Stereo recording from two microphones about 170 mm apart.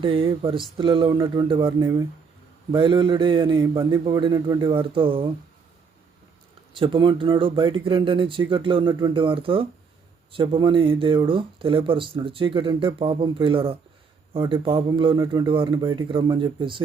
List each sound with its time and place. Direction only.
0.0 s a man's voice: 30° right (ahead or behind)
6.7 s a man's voice: 30° right (ahead or behind)